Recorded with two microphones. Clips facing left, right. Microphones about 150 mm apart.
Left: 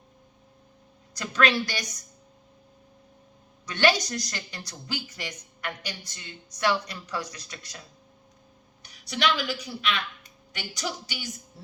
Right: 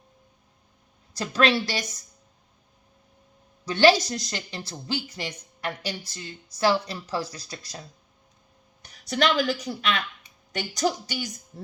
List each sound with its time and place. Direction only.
1.2 s speech: 30° right (ahead or behind)
3.7 s speech: 30° right (ahead or behind)
8.8 s a woman's voice: 45° right (ahead or behind)